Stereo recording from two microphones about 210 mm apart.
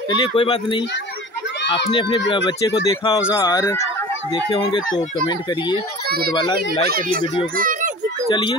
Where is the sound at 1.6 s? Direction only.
55° left (ahead or behind).